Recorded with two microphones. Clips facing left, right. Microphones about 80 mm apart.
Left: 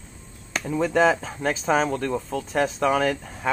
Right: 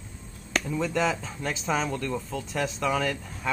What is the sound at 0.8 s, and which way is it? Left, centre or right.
Speech, left.